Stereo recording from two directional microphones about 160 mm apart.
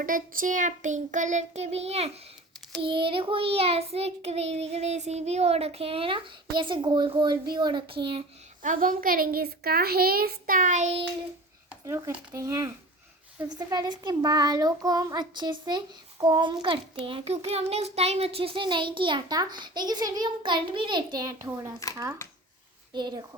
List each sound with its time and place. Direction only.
0.0 s child singing: 60° right (ahead or behind); by 7.3 s 30° right (ahead or behind)
7.5 s a child's voice: 30° right (ahead or behind)
8.6 s a child's voice: 60° right (ahead or behind)
11.9 s a child's voice: 15° right (ahead or behind)
16.2 s child singing: 30° right (ahead or behind)
22.9 s a child's voice: 25° right (ahead or behind)